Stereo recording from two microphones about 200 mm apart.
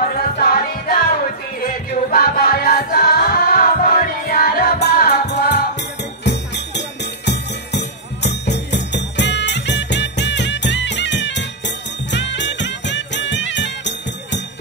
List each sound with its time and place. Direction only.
0.0 s music: 45° left (ahead or behind)
2.0 s music: 45° left (ahead or behind)